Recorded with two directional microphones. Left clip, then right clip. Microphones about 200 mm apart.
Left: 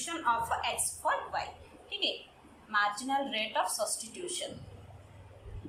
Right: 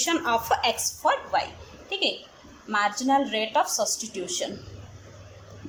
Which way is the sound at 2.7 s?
35° right (ahead or behind).